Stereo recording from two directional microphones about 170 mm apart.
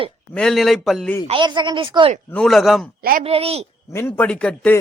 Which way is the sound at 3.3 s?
35° right (ahead or behind).